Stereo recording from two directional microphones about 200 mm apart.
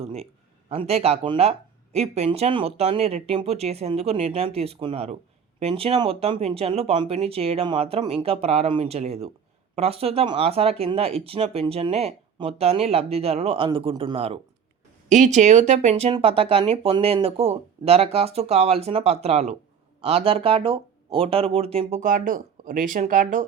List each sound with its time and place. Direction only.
0.0 s speech: 30° right (ahead or behind)